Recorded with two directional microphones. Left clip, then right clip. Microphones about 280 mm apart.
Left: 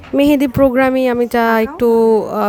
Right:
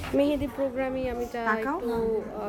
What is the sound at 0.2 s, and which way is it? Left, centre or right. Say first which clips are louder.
Speech: left 15 dB; left.